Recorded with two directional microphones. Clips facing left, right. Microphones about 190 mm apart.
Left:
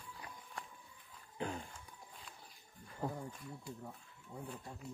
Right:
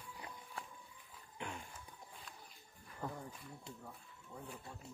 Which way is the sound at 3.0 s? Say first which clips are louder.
Left 4 dB; 30° left (ahead or behind).